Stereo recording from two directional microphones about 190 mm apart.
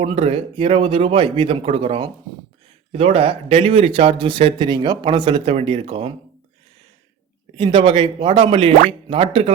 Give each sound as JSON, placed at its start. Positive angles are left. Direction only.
{"t": 0.0, "sound": "a man's voice", "side_deg": -30}
{"t": 7.5, "sound": "a man's voice", "side_deg": -25}